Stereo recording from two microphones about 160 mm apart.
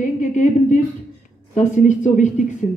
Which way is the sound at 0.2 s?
50° left (ahead or behind).